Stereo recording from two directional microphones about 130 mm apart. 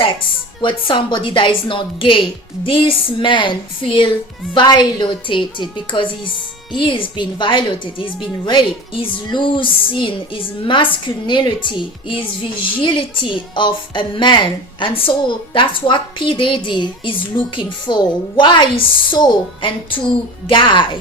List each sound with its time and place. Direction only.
0.6 s a woman's voice: 40° left (ahead or behind)